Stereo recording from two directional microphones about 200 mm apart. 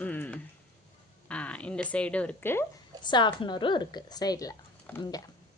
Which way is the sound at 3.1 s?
25° left (ahead or behind).